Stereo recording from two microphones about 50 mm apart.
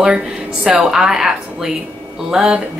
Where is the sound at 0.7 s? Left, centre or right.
Centre.